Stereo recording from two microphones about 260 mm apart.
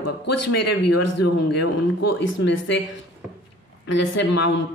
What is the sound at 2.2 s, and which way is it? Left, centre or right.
Speech, left.